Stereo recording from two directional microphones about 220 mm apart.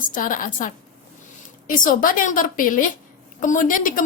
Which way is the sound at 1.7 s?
40° left (ahead or behind).